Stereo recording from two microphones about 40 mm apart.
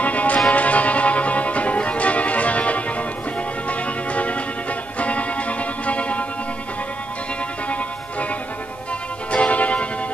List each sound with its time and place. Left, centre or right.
0.0 s music: left
9.3 s music: left